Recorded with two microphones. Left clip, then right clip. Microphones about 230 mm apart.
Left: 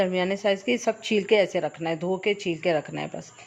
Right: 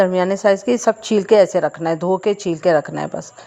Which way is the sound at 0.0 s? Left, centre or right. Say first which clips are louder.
Right 9 dB; right.